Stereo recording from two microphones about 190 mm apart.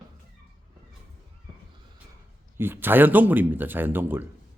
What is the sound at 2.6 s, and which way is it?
Speech, 10° right (ahead or behind).